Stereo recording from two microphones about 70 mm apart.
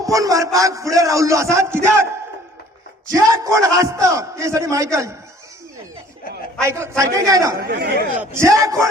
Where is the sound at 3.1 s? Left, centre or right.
Right.